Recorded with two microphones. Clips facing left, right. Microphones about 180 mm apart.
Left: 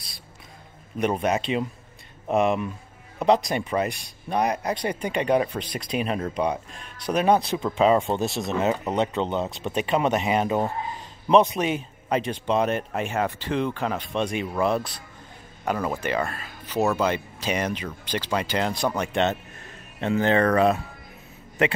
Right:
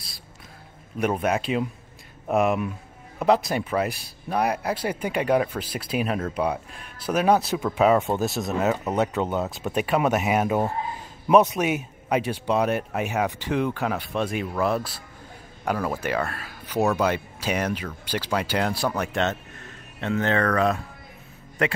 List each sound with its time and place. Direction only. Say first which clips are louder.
0.9 s speech: even; 5° right (ahead or behind)
20.2 s speech: left 3 dB; 30° left (ahead or behind)